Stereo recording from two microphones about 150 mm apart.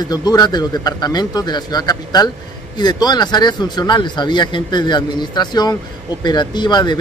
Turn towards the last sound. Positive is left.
turn(degrees=30)  # may be behind; listen again after turning